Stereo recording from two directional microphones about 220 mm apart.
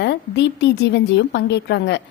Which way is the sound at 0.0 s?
50° left (ahead or behind).